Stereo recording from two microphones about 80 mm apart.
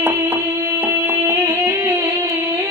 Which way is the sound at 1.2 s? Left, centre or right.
Right.